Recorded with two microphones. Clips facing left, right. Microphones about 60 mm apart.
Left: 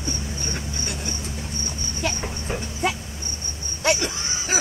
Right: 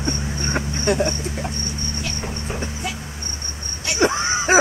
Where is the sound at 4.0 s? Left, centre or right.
Right.